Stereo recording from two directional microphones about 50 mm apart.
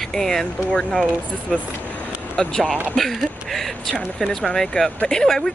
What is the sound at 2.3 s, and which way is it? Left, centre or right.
Speech, centre.